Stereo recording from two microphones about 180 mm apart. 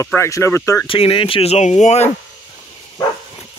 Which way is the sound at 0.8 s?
30° left (ahead or behind).